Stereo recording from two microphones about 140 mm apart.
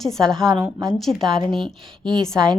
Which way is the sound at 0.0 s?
5° left (ahead or behind).